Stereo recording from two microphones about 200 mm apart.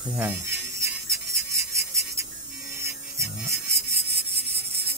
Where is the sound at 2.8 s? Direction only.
15° right (ahead or behind).